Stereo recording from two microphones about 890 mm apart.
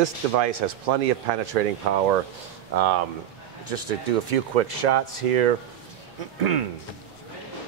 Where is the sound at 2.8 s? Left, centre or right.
Right.